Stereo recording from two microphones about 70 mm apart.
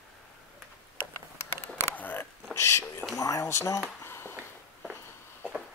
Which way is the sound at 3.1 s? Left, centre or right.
Left.